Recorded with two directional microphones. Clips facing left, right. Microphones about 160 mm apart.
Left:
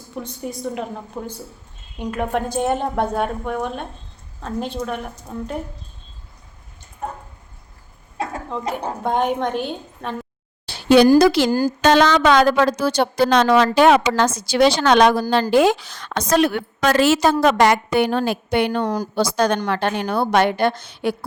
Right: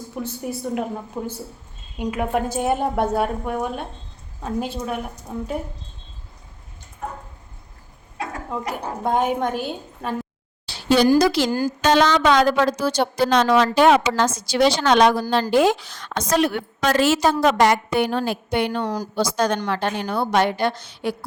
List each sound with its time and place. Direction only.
0.2 s a woman's voice: 5° right (ahead or behind)
8.2 s a sound: 25° left (ahead or behind)
9.0 s a woman's voice: 5° right (ahead or behind)
10.7 s a sound: 60° left (ahead or behind)
11.2 s a woman's voice: 60° left (ahead or behind)
11.8 s a woman's voice: 70° left (ahead or behind)
15.3 s a woman's voice: 75° left (ahead or behind); by 21.2 s 60° left (ahead or behind)